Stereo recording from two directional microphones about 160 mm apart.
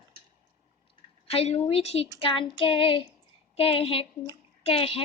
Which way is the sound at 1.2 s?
40° left (ahead or behind).